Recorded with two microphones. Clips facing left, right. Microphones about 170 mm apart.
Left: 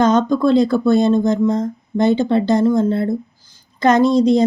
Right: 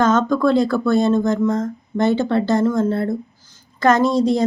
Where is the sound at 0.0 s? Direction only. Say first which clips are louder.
Left 2 dB; 20° left (ahead or behind).